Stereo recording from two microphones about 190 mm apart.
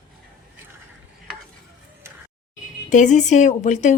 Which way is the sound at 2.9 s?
40° left (ahead or behind).